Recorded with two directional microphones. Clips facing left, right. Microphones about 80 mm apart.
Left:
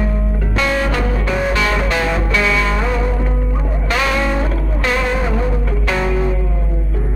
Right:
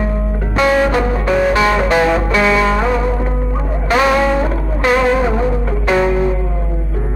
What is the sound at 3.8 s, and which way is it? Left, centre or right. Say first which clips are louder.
Music: right 6 dB; centre.